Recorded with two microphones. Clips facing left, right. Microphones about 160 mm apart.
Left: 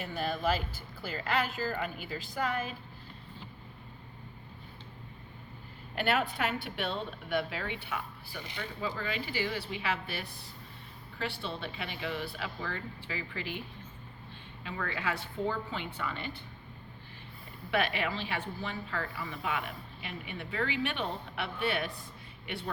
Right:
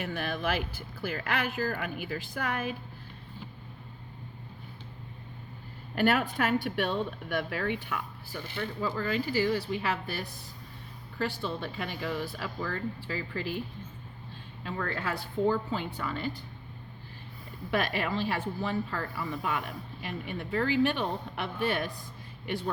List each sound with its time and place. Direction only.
0.0 s a woman's voice: 65° right (ahead or behind)
6.3 s speech: 45° right (ahead or behind)
8.8 s speech: 40° right (ahead or behind)
14.6 s speech: 40° right (ahead or behind)
17.7 s speech: 40° right (ahead or behind)